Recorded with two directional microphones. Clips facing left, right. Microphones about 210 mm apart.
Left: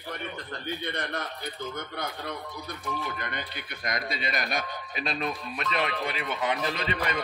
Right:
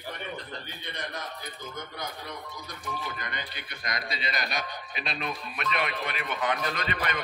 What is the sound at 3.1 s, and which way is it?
A man's voice, 55° left (ahead or behind).